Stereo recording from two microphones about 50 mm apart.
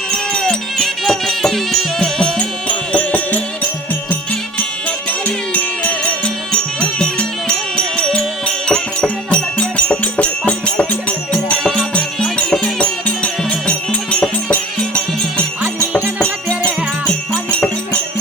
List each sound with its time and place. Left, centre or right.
0.1 s music: centre
2.4 s music: left
5.2 s music: left
11.6 s music: centre
12.2 s music: left
16.6 s music: centre